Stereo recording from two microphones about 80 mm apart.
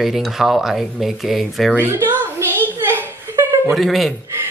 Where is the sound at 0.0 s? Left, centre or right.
Centre.